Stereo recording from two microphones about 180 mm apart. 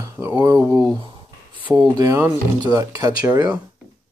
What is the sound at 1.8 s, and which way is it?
Speech, 20° right (ahead or behind).